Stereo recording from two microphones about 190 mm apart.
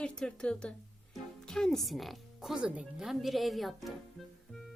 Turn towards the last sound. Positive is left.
turn(degrees=0)  # may be behind; listen again after turning